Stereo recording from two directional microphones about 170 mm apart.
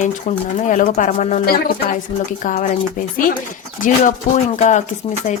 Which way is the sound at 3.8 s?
45° left (ahead or behind).